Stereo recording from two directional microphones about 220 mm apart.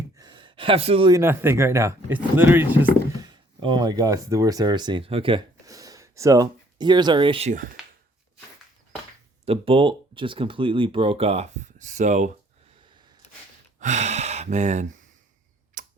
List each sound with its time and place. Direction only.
0.2 s speech: 20° right (ahead or behind)
3.2 s speech: 20° right (ahead or behind)
9.5 s speech: 25° right (ahead or behind)
13.7 s gasp: 35° right (ahead or behind)
15.8 s tick-tock: 35° right (ahead or behind)